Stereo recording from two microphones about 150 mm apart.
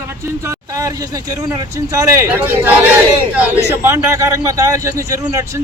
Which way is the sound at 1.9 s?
20° right (ahead or behind).